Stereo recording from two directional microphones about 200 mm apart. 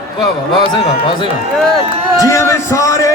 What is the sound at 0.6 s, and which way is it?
Speech, 25° left (ahead or behind).